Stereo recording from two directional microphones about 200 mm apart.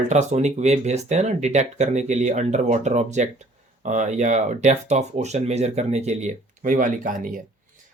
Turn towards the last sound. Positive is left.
turn(degrees=-40)  # may be behind; listen again after turning